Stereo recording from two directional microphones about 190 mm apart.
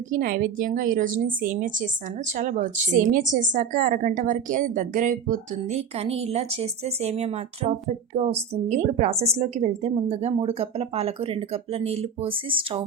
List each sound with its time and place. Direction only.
0.1 s a woman's voice: 45° right (ahead or behind); by 12.8 s 25° right (ahead or behind)